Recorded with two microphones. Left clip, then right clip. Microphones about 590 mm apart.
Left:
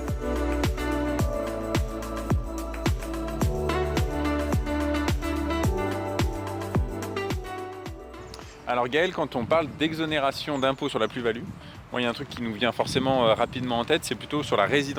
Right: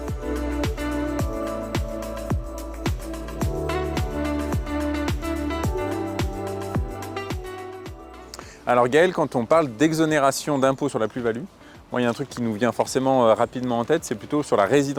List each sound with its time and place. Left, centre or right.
0.6 s music: centre
8.6 s speech: right